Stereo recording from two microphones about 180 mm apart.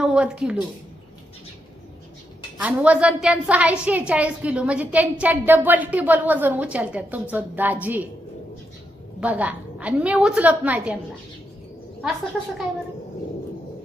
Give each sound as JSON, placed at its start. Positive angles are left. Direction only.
{"t": 0.0, "sound": "a woman's voice", "side_deg": -5}
{"t": 2.6, "sound": "a woman's voice", "side_deg": -5}
{"t": 9.2, "sound": "a woman's voice", "side_deg": -10}